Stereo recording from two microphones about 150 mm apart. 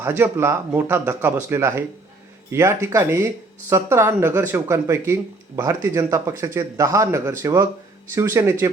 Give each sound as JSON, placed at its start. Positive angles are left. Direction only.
{"t": 0.0, "sound": "speech", "side_deg": -15}